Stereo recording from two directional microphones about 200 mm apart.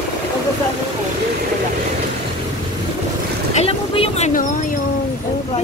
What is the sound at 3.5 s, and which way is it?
Vehicle, 30° left (ahead or behind).